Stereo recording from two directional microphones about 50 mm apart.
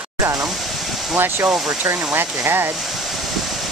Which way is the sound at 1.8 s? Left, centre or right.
Right.